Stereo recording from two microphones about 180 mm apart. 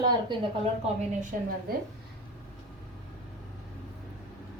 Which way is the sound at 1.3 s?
55° right (ahead or behind).